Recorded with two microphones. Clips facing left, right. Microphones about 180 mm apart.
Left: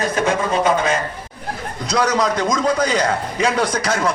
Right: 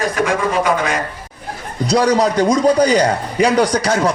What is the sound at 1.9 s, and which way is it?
Rub, 35° right (ahead or behind).